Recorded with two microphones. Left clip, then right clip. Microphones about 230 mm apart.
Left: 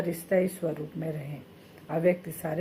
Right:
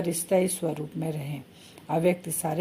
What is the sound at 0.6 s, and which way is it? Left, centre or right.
Speech, right.